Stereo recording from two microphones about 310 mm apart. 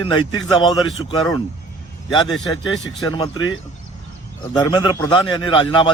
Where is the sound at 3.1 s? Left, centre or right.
Centre.